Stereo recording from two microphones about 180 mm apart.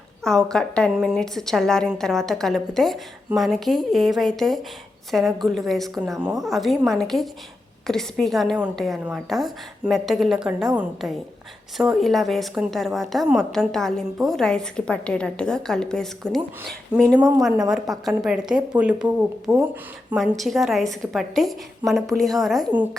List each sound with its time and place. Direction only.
0.3 s a woman's voice: 5° left (ahead or behind)
11.8 s a woman's voice: centre (ahead or behind)
17.2 s a woman's voice: 20° right (ahead or behind)
17.4 s a woman's voice: 5° right (ahead or behind)